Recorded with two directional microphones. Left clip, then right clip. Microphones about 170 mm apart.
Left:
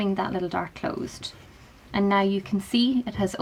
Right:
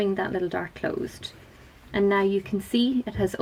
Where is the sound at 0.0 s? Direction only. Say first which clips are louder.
Right 1 dB; 30° left (ahead or behind).